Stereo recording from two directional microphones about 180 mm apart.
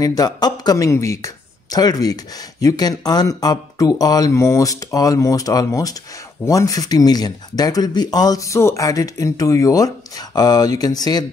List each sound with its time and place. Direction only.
0.0 s speech: 20° left (ahead or behind)